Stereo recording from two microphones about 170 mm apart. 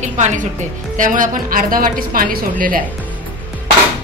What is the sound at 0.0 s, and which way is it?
A woman's voice, 45° right (ahead or behind).